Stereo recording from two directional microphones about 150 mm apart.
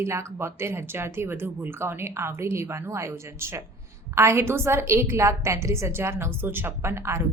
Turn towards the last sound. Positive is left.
turn(degrees=-20)  # may be behind; listen again after turning